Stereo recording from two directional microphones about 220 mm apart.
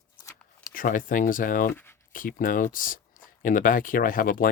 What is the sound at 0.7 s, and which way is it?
Speech, 40° left (ahead or behind).